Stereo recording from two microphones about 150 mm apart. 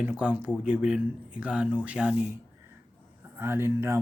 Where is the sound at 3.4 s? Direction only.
15° right (ahead or behind).